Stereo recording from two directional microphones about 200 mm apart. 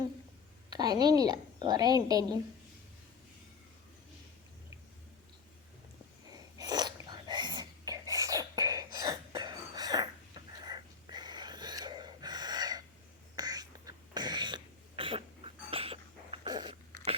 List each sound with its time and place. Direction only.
0.7 s a woman's voice: 20° right (ahead or behind)
6.3 s sneeze: 20° right (ahead or behind)
13.3 s a sound: 20° right (ahead or behind)